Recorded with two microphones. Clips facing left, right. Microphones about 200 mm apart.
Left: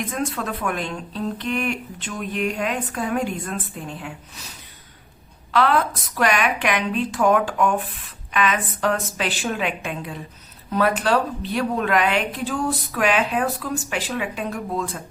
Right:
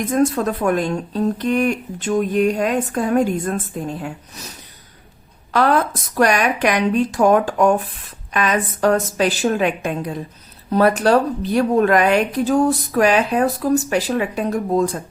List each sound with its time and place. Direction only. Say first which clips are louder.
0.0 s a woman's voice: right 9 dB; 40° right (ahead or behind)
5.5 s a woman's voice: right 3 dB; 45° right (ahead or behind)